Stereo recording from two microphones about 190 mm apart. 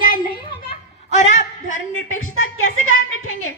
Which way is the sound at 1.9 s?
90° left.